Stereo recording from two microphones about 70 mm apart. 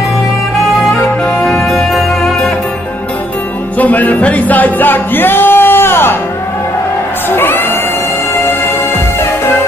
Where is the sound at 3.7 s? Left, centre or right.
Left.